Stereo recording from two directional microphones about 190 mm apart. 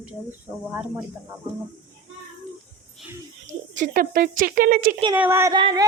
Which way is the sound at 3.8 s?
50° right (ahead or behind).